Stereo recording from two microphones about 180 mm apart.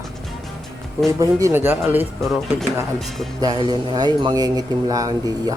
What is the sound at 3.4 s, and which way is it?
Speech, 25° right (ahead or behind).